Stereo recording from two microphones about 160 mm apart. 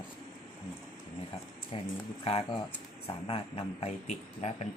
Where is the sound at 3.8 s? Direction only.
45° left (ahead or behind).